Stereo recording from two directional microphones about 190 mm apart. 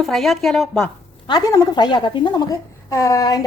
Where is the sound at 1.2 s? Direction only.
25° left (ahead or behind).